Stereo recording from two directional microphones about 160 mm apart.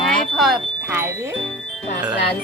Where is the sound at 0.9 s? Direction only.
15° right (ahead or behind).